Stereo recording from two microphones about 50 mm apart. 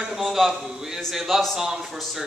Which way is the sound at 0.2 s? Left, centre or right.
Centre.